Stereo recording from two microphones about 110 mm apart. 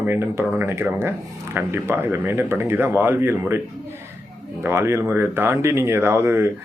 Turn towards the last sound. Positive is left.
turn(degrees=-25)  # may be behind; listen again after turning